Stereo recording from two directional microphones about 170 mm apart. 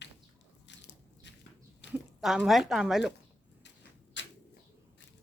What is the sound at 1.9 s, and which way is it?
Speech, 5° right (ahead or behind).